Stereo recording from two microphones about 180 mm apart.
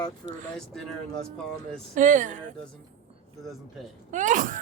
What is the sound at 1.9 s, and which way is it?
Speech, 45° right (ahead or behind).